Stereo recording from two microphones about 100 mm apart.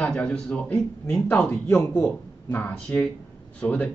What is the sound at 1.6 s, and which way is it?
Speech, 25° left (ahead or behind).